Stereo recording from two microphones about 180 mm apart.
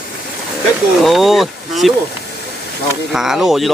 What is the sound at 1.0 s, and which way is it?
Speech, centre (ahead or behind).